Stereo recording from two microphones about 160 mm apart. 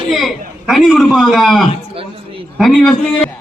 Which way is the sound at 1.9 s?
35° right (ahead or behind).